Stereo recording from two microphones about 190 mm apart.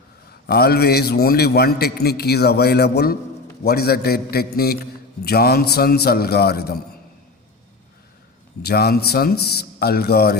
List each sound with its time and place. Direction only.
0.4 s a man's voice: 55° left (ahead or behind)
8.6 s a man's voice: 55° left (ahead or behind)